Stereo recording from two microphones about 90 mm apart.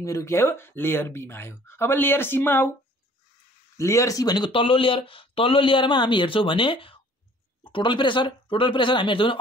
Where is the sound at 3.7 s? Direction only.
35° left (ahead or behind).